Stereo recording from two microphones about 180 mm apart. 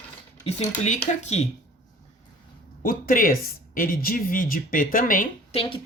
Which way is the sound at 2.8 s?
50° left (ahead or behind).